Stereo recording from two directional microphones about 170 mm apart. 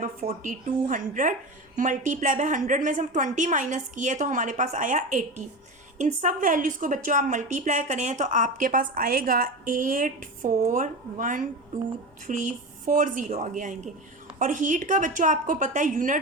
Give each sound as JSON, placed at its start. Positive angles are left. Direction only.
{"t": 0.0, "sound": "a woman's voice", "side_deg": -50}